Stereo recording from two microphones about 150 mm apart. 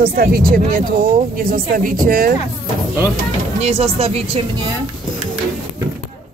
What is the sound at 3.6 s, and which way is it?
Speech, 45° right (ahead or behind).